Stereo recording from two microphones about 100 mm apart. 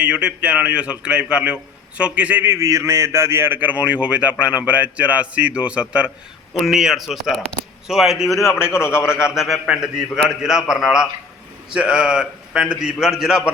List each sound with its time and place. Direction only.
0.0 s a man's voice: 10° right (ahead or behind)
2.5 s a man's voice: 30° right (ahead or behind); by 8.4 s centre (ahead or behind)
8.4 s a man's voice: 30° left (ahead or behind)
9.2 s a man's voice: 5° right (ahead or behind)